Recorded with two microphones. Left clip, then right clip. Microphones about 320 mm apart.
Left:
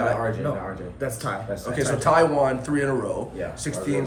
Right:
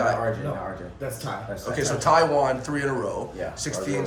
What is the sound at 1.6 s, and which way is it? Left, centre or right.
Speech, centre.